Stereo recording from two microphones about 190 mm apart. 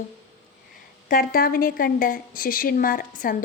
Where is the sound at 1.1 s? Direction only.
50° left (ahead or behind).